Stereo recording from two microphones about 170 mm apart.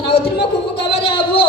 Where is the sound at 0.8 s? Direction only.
35° left (ahead or behind).